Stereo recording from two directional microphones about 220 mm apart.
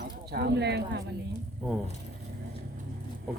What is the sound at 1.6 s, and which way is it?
Speech, centre (ahead or behind).